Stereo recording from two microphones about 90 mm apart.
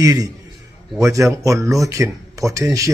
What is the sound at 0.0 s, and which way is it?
A man's voice, 45° right (ahead or behind).